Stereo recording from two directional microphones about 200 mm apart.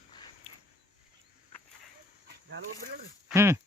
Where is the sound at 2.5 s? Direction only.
55° right (ahead or behind).